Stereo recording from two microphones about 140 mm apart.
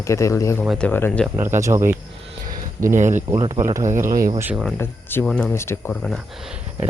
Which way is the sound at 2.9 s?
60° right (ahead or behind).